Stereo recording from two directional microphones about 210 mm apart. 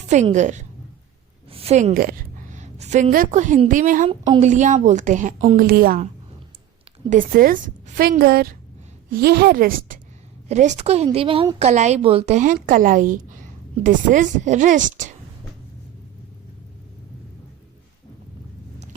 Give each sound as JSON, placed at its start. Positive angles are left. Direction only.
{"t": 0.1, "sound": "a woman's voice", "side_deg": -35}
{"t": 1.5, "sound": "a sound", "side_deg": -30}
{"t": 1.9, "sound": "a woman's voice", "side_deg": -45}
{"t": 4.1, "sound": "a woman's voice", "side_deg": -30}
{"t": 5.5, "sound": "a woman's voice", "side_deg": -45}
{"t": 7.1, "sound": "a woman's voice", "side_deg": -40}